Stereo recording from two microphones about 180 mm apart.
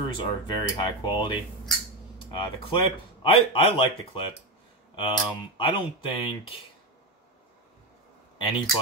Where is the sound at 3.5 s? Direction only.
30° left (ahead or behind).